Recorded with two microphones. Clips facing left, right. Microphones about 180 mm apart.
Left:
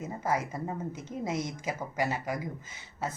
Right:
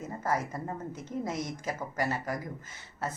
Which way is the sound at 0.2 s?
15° left (ahead or behind).